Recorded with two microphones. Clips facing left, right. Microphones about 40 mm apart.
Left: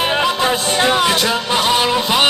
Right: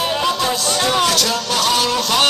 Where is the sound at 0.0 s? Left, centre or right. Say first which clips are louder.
Left 2 dB; left.